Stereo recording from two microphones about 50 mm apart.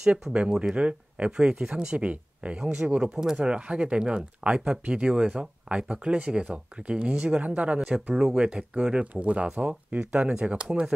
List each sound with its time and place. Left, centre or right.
0.3 s speech: centre
7.9 s speech: centre